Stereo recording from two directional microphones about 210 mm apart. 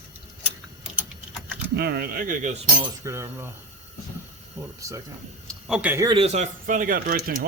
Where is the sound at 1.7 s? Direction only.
50° right (ahead or behind).